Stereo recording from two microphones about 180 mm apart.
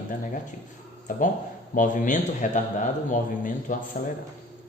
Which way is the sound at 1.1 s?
50° left (ahead or behind).